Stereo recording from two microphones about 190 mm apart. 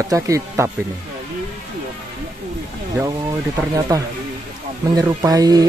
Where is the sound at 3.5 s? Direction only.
20° right (ahead or behind).